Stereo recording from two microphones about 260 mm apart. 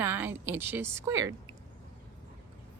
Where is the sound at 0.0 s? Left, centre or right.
Centre.